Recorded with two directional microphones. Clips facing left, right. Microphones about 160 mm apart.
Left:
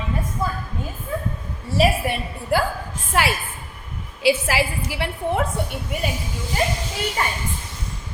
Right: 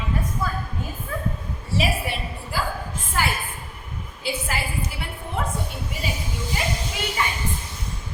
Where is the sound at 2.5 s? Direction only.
65° left (ahead or behind).